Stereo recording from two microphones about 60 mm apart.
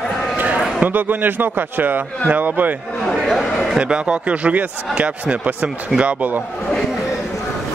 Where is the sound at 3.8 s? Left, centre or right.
Centre.